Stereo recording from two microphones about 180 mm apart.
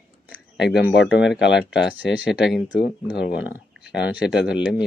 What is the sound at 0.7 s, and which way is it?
Speech, 85° left.